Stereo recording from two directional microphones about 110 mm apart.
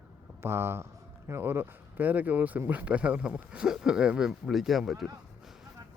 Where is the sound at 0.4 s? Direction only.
20° right (ahead or behind).